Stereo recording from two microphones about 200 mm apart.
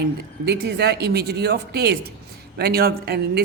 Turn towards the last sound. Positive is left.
turn(degrees=-50)  # may be behind; listen again after turning